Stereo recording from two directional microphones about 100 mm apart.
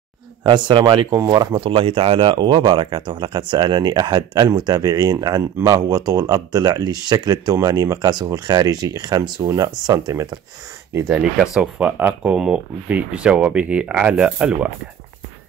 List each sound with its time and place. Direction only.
0.4 s speech: 50° right (ahead or behind)
1.1 s speech: 35° right (ahead or behind)
1.5 s speech: 60° right (ahead or behind); by 10.4 s 40° right (ahead or behind)
11.1 s speech: 5° right (ahead or behind)